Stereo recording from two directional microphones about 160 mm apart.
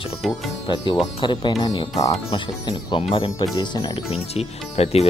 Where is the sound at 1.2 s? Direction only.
30° left (ahead or behind).